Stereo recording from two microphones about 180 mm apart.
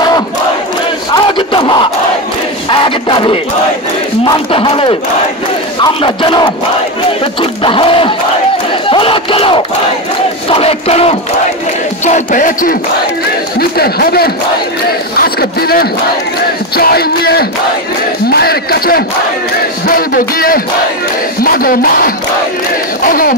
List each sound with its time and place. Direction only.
1.1 s battle cry: 25° left (ahead or behind)
2.7 s music: 30° left (ahead or behind)
4.3 s speech: 30° left (ahead or behind)
6.0 s speech: 25° left (ahead or behind)
7.6 s speech: 30° left (ahead or behind)
10.5 s battle cry: 35° left (ahead or behind)
12.0 s speech: 45° left (ahead or behind)
13.6 s speech: 60° left (ahead or behind)